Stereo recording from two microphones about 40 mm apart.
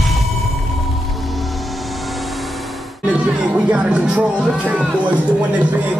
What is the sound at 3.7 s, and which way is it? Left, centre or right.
Music, right.